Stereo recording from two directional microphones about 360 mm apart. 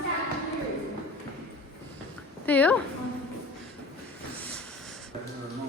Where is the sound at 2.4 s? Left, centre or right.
Centre.